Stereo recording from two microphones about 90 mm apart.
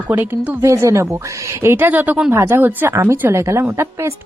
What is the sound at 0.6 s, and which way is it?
A woman's voice, 35° right (ahead or behind).